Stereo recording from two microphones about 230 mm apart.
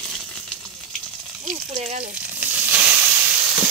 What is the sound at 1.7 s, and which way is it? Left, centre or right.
Speech, right.